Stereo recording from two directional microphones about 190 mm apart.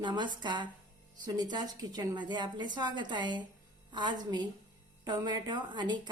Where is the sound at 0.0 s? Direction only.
25° right (ahead or behind).